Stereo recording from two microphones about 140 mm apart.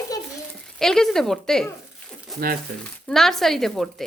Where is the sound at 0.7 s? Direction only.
5° left (ahead or behind).